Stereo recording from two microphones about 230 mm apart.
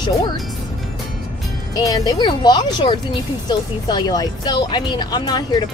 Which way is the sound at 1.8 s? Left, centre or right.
Centre.